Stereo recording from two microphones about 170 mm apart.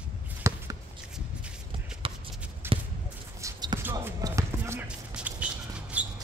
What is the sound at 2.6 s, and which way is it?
Basketball bounce, 15° right (ahead or behind).